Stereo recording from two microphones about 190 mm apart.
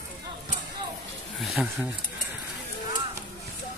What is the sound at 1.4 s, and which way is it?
Speech, centre (ahead or behind).